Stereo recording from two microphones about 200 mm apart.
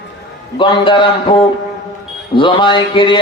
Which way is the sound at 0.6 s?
25° left (ahead or behind).